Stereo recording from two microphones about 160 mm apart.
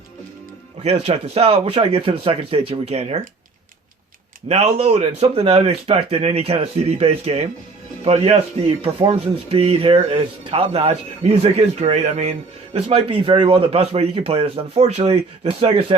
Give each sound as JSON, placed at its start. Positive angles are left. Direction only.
{"t": 0.9, "sound": "a man's voice", "side_deg": -40}
{"t": 4.4, "sound": "a man's voice", "side_deg": -40}